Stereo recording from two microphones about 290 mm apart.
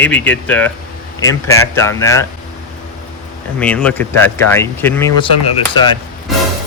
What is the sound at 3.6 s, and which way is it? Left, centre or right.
Speech, centre.